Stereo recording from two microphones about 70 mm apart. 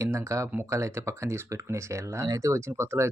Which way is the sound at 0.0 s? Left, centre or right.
Right.